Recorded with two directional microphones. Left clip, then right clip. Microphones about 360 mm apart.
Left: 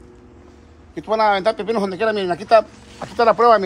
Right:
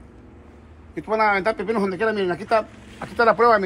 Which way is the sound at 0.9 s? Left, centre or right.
Left.